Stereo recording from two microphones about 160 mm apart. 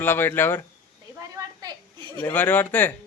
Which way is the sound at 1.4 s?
25° right (ahead or behind).